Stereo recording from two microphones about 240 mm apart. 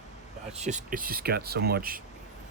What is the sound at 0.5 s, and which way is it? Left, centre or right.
Speech, right.